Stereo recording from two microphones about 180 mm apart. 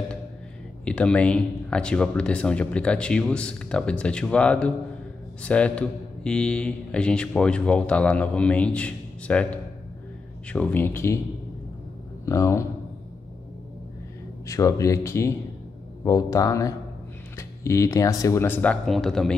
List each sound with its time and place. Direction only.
0.8 s a man's voice: 5° left (ahead or behind)
12.3 s a man's voice: 15° left (ahead or behind)
14.5 s a man's voice: 15° left (ahead or behind)